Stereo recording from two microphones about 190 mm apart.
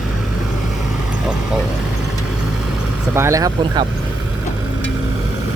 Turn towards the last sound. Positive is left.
turn(degrees=-20)  # may be behind; listen again after turning